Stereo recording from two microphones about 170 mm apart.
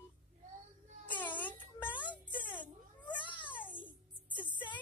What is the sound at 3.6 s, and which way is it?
Music, 10° left (ahead or behind).